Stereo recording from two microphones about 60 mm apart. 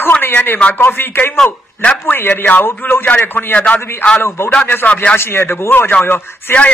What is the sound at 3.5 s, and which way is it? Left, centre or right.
Speech, left.